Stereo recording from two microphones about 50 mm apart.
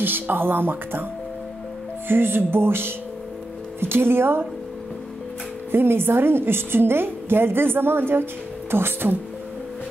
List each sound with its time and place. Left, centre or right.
0.0 s a woman's voice: right
2.0 s a woman's voice: right
5.7 s a woman's voice: right